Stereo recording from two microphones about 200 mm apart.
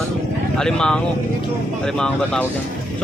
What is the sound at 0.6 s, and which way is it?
Speech, 5° left (ahead or behind).